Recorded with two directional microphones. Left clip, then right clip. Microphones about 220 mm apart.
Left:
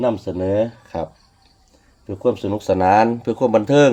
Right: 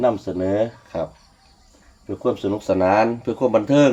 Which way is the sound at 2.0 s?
50° left (ahead or behind).